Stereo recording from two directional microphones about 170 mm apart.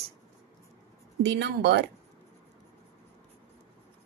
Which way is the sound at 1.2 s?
85° right.